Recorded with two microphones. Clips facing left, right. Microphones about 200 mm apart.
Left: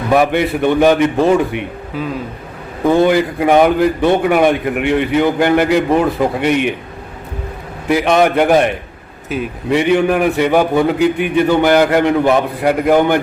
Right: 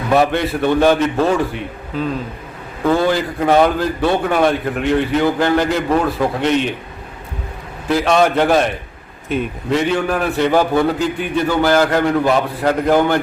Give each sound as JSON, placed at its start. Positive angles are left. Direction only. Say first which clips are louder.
{"t": 0.1, "sound": "a man's voice", "louder": "left 2 dB", "side_deg": 15}
{"t": 7.9, "sound": "a man's voice", "louder": "left 2 dB", "side_deg": 15}
{"t": 9.7, "sound": "a man's voice", "louder": "left 5 dB", "side_deg": 15}